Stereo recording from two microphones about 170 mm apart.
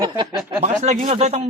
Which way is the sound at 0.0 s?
25° right (ahead or behind).